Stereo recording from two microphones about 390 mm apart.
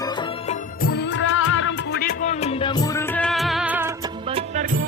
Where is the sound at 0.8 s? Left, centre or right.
Left.